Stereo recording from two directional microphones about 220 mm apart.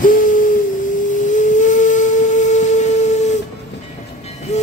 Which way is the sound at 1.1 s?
35° left (ahead or behind).